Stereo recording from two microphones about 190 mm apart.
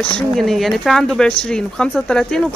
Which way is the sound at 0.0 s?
5° left (ahead or behind).